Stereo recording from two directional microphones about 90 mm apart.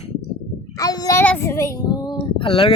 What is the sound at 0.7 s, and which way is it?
Speech, 45° left (ahead or behind).